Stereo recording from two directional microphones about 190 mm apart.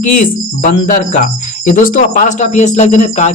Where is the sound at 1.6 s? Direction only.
45° left (ahead or behind).